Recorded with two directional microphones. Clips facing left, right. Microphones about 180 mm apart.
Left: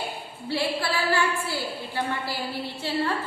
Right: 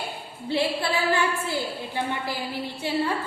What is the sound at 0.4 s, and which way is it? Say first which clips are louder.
A woman's voice: right 2 dB; 20° right (ahead or behind).